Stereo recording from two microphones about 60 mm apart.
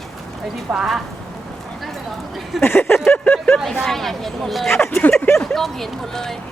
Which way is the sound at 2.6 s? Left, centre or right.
Left.